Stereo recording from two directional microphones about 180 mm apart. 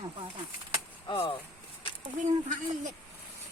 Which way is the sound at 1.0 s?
30° left (ahead or behind).